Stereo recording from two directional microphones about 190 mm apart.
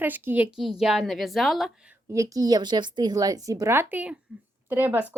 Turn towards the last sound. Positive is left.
turn(degrees=-10)  # may be behind; listen again after turning